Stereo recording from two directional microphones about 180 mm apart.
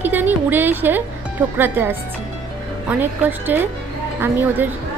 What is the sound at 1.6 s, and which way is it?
A woman's voice, 10° right (ahead or behind).